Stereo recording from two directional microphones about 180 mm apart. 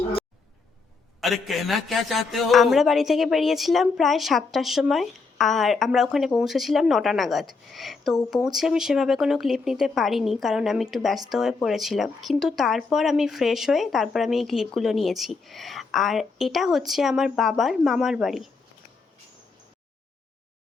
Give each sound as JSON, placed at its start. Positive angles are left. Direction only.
{"t": 1.2, "sound": "a man's voice", "side_deg": 0}